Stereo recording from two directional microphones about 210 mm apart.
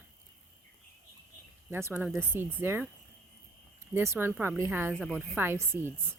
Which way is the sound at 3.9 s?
10° right (ahead or behind).